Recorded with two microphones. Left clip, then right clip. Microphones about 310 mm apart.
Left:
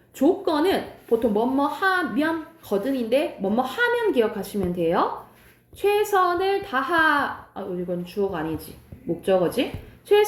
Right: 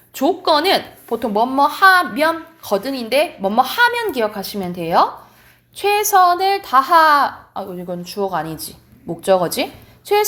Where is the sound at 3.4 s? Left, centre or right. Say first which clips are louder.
Right 9 dB; centre.